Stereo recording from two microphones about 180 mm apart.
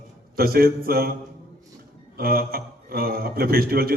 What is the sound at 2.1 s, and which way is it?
A man's voice, 55° right (ahead or behind).